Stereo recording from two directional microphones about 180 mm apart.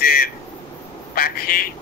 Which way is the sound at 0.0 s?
55° left (ahead or behind).